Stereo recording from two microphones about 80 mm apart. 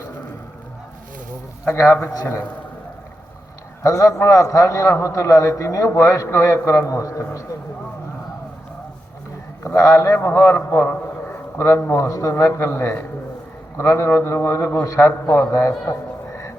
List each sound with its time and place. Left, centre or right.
1.7 s a man's voice: left
3.8 s a man's voice: left
9.7 s a man's voice: left
15.9 s a sound: left